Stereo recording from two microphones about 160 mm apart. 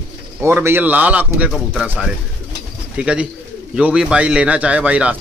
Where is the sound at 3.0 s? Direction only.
5° right (ahead or behind).